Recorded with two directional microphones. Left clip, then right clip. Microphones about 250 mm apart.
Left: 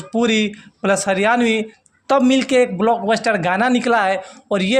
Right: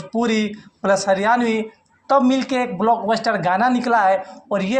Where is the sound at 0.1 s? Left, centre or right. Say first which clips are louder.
Left 3 dB; left.